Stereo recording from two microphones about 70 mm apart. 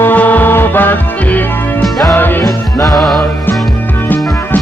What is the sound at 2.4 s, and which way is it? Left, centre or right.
Music, left.